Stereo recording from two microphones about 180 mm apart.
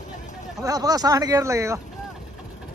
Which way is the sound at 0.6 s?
20° right (ahead or behind).